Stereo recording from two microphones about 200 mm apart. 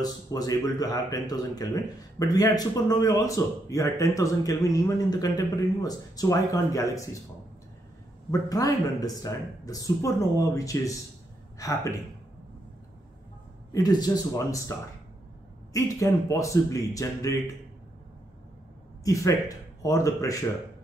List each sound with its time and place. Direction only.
0.0 s a man's voice: 20° left (ahead or behind)
8.3 s a man's voice: 20° left (ahead or behind)
13.7 s a man's voice: 15° left (ahead or behind)
15.7 s a man's voice: 15° left (ahead or behind)
19.0 s a man's voice: 15° left (ahead or behind)